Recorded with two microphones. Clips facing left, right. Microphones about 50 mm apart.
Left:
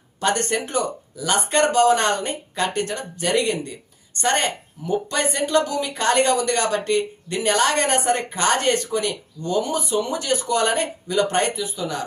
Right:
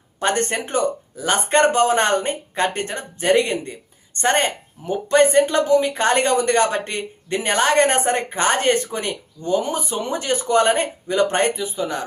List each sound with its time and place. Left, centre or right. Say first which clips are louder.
0.2 s speech: right 1 dB; right